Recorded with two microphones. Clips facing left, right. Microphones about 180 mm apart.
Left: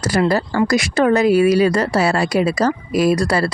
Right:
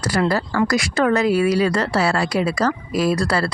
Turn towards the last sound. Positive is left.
turn(degrees=20)  # may be behind; listen again after turning